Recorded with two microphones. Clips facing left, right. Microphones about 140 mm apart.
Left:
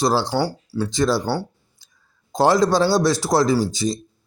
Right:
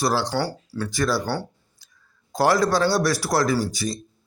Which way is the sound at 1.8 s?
25° left (ahead or behind).